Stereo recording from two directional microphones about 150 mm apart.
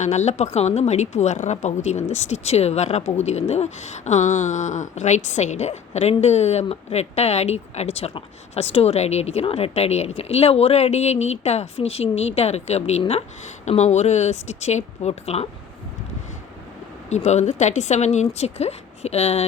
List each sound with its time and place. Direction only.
0.0 s speech: 50° left (ahead or behind)
17.1 s speech: 50° left (ahead or behind)